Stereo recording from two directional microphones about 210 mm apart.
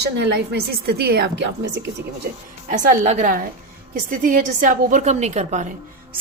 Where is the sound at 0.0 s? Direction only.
50° right (ahead or behind).